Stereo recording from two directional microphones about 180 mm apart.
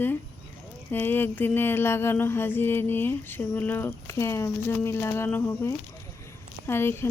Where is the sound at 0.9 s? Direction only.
10° left (ahead or behind).